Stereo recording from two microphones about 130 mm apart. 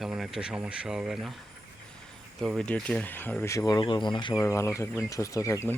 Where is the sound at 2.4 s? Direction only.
Centre (ahead or behind); by 3.8 s 25° left (ahead or behind).